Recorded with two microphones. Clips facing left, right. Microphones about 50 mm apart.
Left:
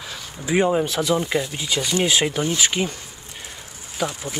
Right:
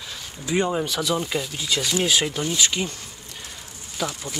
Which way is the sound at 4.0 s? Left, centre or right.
Centre.